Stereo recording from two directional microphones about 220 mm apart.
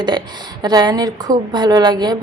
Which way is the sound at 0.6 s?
20° right (ahead or behind).